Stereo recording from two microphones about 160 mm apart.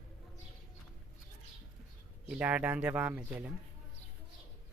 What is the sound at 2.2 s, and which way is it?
Speech, 5° right (ahead or behind).